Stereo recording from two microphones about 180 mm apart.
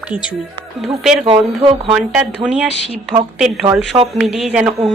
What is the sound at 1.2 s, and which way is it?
Speech, 30° right (ahead or behind).